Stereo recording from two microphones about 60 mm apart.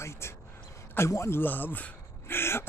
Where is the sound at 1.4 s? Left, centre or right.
Left.